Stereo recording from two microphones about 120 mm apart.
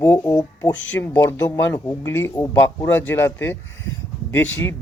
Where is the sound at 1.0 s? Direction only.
25° left (ahead or behind).